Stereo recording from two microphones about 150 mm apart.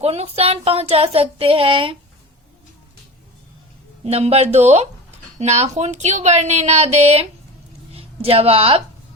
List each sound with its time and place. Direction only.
0.0 s child singing: 45° right (ahead or behind)
4.0 s a woman's voice: 40° right (ahead or behind)